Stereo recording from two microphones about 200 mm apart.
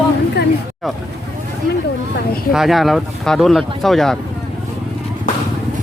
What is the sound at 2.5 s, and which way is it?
Speech, centre (ahead or behind).